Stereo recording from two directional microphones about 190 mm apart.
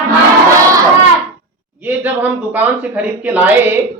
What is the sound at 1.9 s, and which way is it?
Speech, 10° right (ahead or behind).